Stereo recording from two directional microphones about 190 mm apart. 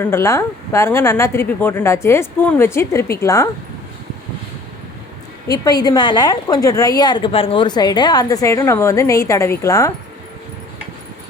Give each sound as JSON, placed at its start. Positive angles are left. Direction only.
{"t": 0.0, "sound": "a woman's voice", "side_deg": 15}
{"t": 5.5, "sound": "a woman's voice", "side_deg": 20}